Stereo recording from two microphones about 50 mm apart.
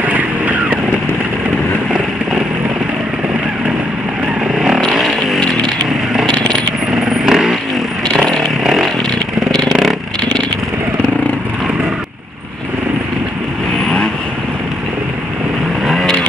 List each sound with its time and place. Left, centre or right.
0.0 s vehicle: right
4.6 s vehicle: centre
4.9 s chainsaw: centre
6.9 s chainsaw: centre
8.6 s chainsaw: centre